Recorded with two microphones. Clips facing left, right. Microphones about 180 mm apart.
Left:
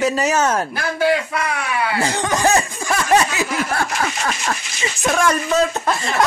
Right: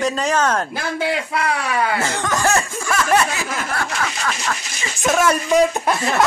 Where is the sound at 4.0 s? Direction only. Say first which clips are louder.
Left 2 dB; 35° left (ahead or behind).